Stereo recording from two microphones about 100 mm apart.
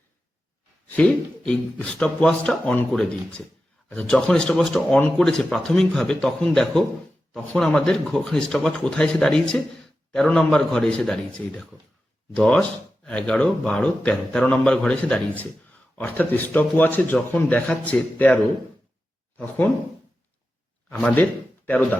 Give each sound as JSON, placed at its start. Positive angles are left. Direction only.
{"t": 0.9, "sound": "a man's voice", "side_deg": 15}
{"t": 13.1, "sound": "speech", "side_deg": 10}
{"t": 20.9, "sound": "speech", "side_deg": 10}